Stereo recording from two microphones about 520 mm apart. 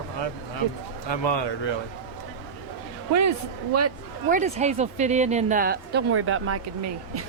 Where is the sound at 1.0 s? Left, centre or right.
Left.